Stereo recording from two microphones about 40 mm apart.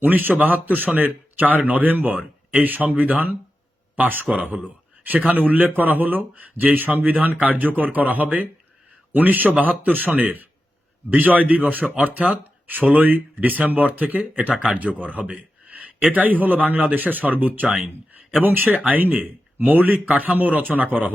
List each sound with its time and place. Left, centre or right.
0.0 s speech: right
14.5 s speech: right
14.8 s speech: right